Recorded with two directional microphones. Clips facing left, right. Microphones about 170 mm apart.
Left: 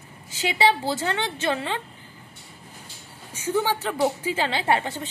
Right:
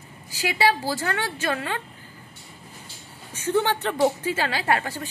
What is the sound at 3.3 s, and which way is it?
Speech, 10° left (ahead or behind).